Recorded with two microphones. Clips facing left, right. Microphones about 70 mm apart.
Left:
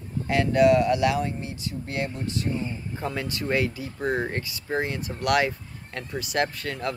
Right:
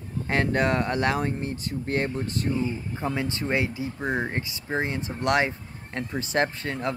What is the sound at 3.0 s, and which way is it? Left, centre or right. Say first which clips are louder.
Speech: right 1 dB; right.